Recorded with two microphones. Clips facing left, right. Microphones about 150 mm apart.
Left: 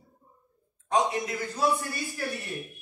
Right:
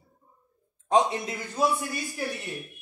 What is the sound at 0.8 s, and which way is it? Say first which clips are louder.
A woman's voice: right 3 dB; 25° right (ahead or behind).